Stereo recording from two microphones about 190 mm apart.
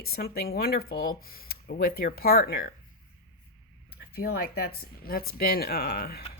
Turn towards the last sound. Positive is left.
turn(degrees=55)  # may be behind; listen again after turning